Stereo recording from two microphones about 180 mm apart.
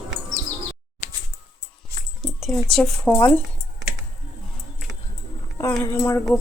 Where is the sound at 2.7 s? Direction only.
5° left (ahead or behind).